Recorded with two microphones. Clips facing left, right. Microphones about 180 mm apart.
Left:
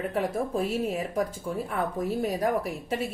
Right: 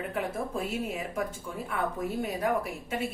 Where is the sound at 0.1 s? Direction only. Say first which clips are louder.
Left 4 dB; 35° left (ahead or behind).